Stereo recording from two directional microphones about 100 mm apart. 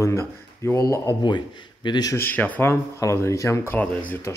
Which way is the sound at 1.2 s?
50° left (ahead or behind).